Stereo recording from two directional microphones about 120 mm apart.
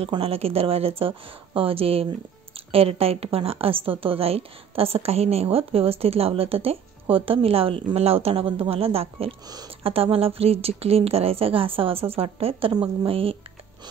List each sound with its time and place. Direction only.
0.0 s a woman's voice: 55° right (ahead or behind)